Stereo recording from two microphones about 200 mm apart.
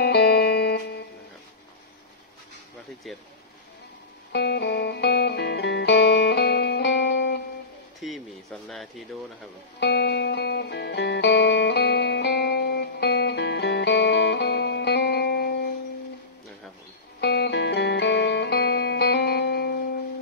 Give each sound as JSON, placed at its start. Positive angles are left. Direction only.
{"t": 0.0, "sound": "music", "side_deg": 55}
{"t": 3.1, "sound": "speech", "side_deg": 0}
{"t": 4.3, "sound": "music", "side_deg": 55}
{"t": 8.0, "sound": "a sound", "side_deg": 0}
{"t": 9.8, "sound": "music", "side_deg": 55}
{"t": 17.2, "sound": "music", "side_deg": 55}